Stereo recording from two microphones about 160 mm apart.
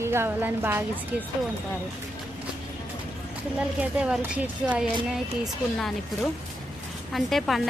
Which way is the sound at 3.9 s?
5° right (ahead or behind).